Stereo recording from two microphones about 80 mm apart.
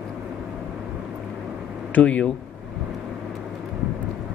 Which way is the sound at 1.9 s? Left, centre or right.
Centre.